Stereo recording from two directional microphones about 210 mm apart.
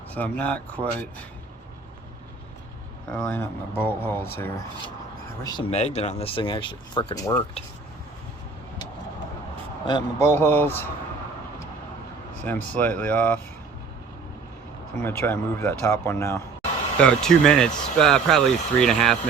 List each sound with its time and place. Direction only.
0.1 s speech: 5° left (ahead or behind)
3.1 s speech: 5° left (ahead or behind)
5.7 s speech: 30° left (ahead or behind); by 7.4 s 15° left (ahead or behind)
9.8 s speech: 15° left (ahead or behind)
12.7 s speech: 5° left (ahead or behind)
14.9 s speech: 10° left (ahead or behind)